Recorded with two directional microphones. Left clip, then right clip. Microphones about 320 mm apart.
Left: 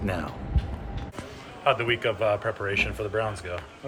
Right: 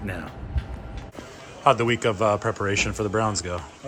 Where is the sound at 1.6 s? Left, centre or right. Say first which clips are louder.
Right 4 dB; centre.